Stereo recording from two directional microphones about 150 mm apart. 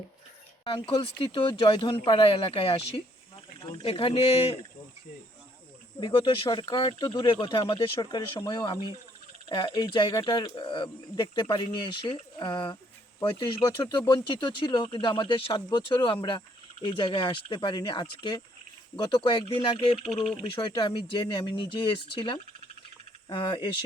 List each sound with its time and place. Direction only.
0.6 s speech: 35° left (ahead or behind)
6.0 s speech: 35° left (ahead or behind)